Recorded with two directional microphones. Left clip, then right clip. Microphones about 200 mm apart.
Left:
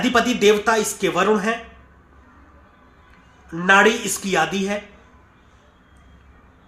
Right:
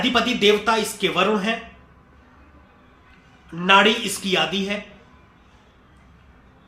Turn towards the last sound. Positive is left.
turn(degrees=20)  # may be behind; listen again after turning